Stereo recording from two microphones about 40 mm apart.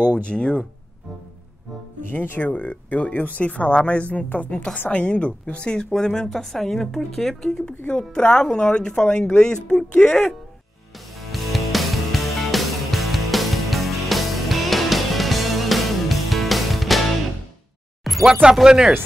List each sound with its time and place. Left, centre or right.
0.0 s speech: left
2.0 s speech: left
4.5 s speech: left
5.9 s speech: centre
11.1 s music: centre
18.2 s speech: centre